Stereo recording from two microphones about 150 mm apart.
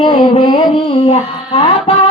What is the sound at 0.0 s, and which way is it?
Speech, 30° left (ahead or behind).